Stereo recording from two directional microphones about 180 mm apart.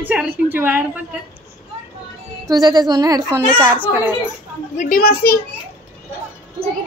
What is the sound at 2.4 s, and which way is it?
Speech, 20° right (ahead or behind).